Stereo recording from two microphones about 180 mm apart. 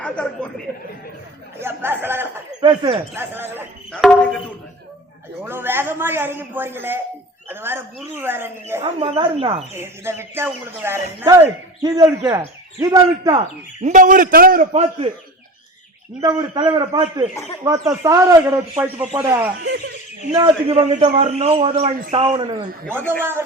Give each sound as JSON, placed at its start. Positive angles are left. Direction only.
{"t": 0.0, "sound": "speech", "side_deg": 5}
{"t": 1.5, "sound": "a man's voice", "side_deg": -10}
{"t": 2.6, "sound": "speech", "side_deg": -30}
{"t": 3.2, "sound": "speech", "side_deg": -10}
{"t": 4.0, "sound": "a sound", "side_deg": 0}
{"t": 5.5, "sound": "a man's voice", "side_deg": -10}
{"t": 8.8, "sound": "speech", "side_deg": -30}
{"t": 9.7, "sound": "a man's voice", "side_deg": -15}
{"t": 13.8, "sound": "a man's voice", "side_deg": -45}
{"t": 16.2, "sound": "a man's voice", "side_deg": -25}
{"t": 20.3, "sound": "speech", "side_deg": -25}
{"t": 20.7, "sound": "speech", "side_deg": -40}
{"t": 22.9, "sound": "a man's voice", "side_deg": -10}